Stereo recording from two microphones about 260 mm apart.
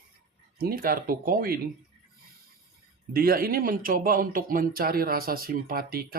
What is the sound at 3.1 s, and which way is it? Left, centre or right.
Speech, right.